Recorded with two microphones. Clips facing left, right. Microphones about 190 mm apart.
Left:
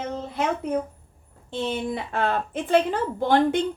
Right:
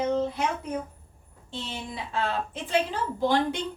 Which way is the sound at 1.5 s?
55° left (ahead or behind).